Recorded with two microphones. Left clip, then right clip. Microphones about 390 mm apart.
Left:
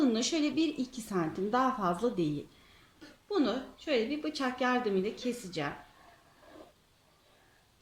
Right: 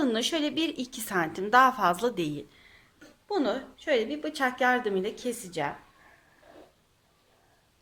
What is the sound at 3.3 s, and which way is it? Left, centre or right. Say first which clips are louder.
Speech: right 3 dB; centre.